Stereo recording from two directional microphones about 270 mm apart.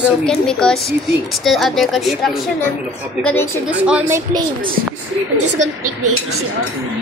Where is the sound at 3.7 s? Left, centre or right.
Centre.